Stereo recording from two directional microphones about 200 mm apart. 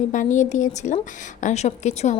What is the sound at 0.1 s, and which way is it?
Speech, 40° left (ahead or behind).